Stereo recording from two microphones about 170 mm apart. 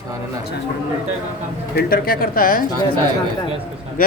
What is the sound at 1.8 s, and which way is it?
Speech, 65° left (ahead or behind).